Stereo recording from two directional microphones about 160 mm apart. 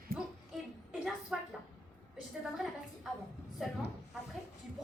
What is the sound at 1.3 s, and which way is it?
Speech, 5° right (ahead or behind).